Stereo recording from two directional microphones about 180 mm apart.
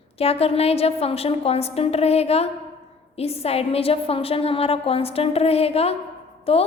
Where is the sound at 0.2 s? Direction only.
35° left (ahead or behind).